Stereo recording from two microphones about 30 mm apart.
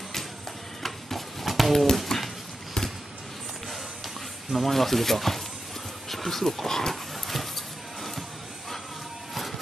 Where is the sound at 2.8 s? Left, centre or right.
Left.